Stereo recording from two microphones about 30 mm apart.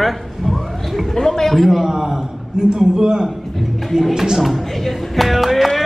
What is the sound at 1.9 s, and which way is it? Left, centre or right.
Speech, centre.